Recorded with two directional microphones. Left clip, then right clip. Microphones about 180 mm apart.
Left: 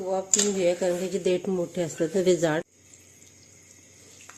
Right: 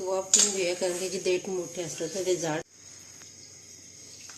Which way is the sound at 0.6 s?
30° left (ahead or behind).